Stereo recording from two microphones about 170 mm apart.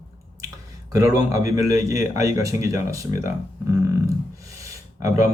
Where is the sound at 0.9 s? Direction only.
20° right (ahead or behind).